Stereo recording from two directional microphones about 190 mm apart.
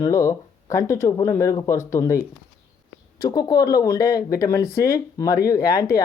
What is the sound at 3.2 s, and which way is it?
Speech, 20° left (ahead or behind).